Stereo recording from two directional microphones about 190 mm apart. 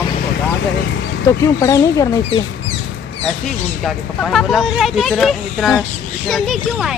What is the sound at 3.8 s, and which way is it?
Speech, centre (ahead or behind).